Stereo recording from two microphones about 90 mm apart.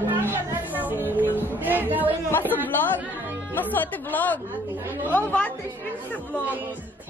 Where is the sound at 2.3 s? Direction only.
20° left (ahead or behind).